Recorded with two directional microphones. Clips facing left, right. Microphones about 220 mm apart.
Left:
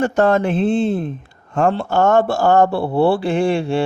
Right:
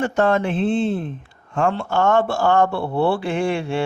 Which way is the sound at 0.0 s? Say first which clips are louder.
Left 3 dB; 40° left (ahead or behind).